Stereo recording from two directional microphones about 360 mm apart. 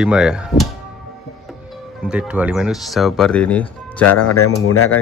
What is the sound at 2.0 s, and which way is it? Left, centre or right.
Speech, centre.